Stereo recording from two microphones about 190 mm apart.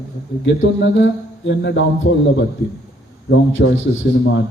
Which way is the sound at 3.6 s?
65° left (ahead or behind).